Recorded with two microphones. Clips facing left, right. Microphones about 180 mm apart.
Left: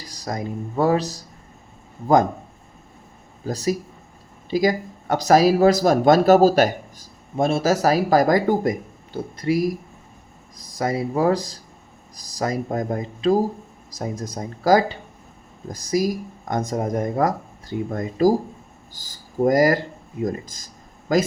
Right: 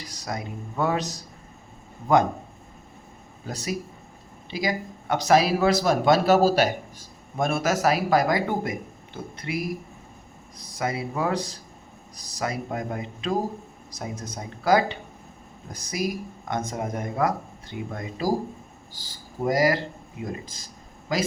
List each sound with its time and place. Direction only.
0.0 s speech: 35° left (ahead or behind)
3.4 s speech: 35° left (ahead or behind)
7.3 s speech: 30° left (ahead or behind)
10.8 s speech: 40° left (ahead or behind)